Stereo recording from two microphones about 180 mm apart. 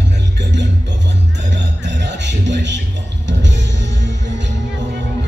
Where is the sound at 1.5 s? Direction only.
75° right (ahead or behind).